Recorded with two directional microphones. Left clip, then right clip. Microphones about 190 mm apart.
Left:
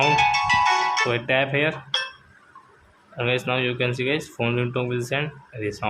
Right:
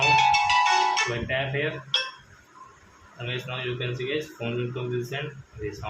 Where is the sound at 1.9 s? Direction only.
25° left (ahead or behind).